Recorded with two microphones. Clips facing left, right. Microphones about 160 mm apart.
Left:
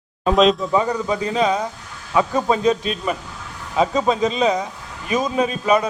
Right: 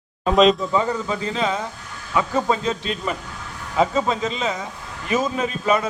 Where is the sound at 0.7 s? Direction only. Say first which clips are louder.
Left 2 dB; 15° left (ahead or behind).